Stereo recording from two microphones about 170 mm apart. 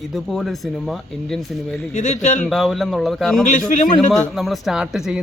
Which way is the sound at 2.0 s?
45° left (ahead or behind).